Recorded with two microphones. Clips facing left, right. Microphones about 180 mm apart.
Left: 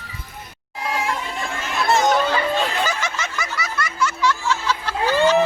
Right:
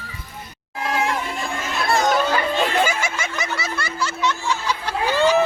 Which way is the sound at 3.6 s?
30° right (ahead or behind).